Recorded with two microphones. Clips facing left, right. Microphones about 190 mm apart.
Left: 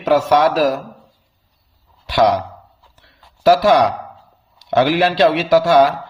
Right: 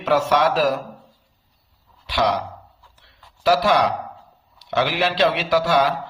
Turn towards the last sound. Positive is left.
turn(degrees=45)  # may be behind; listen again after turning